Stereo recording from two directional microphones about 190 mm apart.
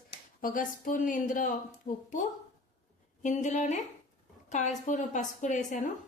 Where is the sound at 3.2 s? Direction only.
40° left (ahead or behind).